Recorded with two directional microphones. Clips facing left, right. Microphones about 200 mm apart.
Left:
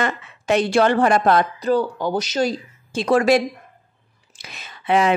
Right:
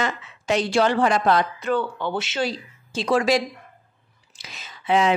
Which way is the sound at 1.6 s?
35° left (ahead or behind).